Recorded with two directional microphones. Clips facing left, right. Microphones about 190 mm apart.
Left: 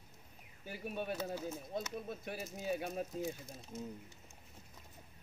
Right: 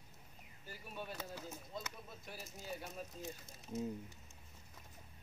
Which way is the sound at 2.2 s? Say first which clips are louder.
Left 9 dB; 65° left (ahead or behind).